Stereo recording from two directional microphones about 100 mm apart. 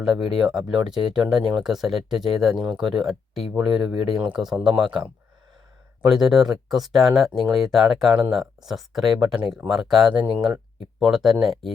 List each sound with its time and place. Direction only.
0.0 s speech: 5° right (ahead or behind)